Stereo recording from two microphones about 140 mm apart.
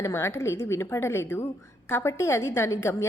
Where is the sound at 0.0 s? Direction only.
15° left (ahead or behind).